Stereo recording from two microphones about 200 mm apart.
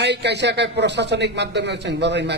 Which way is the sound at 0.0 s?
60° right (ahead or behind).